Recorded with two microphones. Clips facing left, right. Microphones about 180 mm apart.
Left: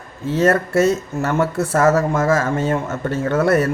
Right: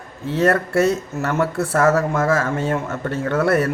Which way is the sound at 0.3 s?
Centre (ahead or behind).